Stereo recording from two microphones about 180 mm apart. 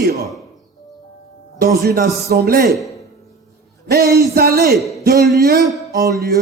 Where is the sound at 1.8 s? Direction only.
60° right (ahead or behind).